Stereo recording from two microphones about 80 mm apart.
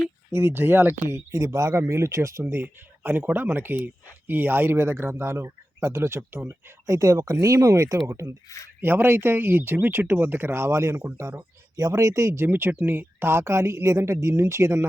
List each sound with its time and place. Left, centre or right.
0.3 s speech: right
2.4 s speech: right
6.8 s speech: right
8.4 s speech: left
8.8 s speech: right
11.3 s speech: right